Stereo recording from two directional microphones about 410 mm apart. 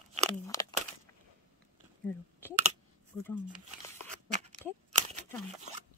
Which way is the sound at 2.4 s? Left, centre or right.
Centre.